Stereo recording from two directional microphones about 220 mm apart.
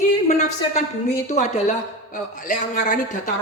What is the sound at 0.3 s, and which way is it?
A woman's voice, 30° left (ahead or behind).